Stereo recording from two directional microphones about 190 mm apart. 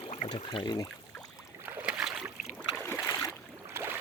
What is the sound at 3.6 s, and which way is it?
Boat, 10° right (ahead or behind).